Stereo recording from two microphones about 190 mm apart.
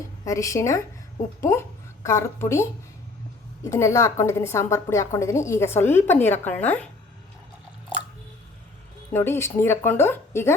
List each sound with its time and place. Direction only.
0.3 s a woman's voice: 15° left (ahead or behind)
3.7 s a woman's voice: 15° left (ahead or behind)
9.1 s a woman's voice: 10° left (ahead or behind)